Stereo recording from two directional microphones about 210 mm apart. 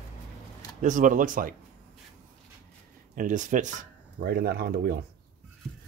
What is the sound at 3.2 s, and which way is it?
Speech, 35° right (ahead or behind).